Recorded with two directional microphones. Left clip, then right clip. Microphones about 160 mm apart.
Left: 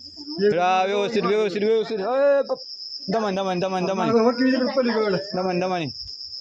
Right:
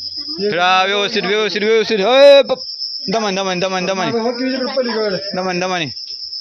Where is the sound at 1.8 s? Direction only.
40° right (ahead or behind).